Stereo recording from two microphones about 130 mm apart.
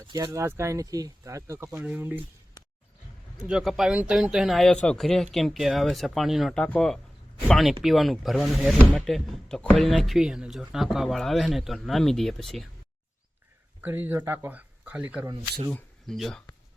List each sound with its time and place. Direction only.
0.3 s speech: 20° right (ahead or behind)
1.7 s speech: 10° right (ahead or behind)
3.4 s speech: 5° right (ahead or behind)
13.8 s speech: 15° right (ahead or behind)
15.7 s speech: centre (ahead or behind)